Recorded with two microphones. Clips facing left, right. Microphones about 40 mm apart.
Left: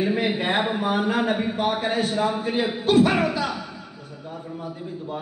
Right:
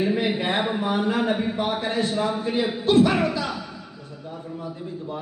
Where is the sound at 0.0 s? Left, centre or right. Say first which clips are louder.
Even; centre.